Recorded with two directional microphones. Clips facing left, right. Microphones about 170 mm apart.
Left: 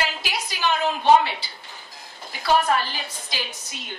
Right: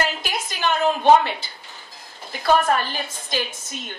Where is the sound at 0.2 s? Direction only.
50° right (ahead or behind).